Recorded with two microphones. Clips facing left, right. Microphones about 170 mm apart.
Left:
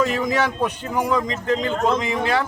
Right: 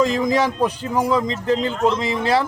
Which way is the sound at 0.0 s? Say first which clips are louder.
Right 3 dB; 35° right (ahead or behind).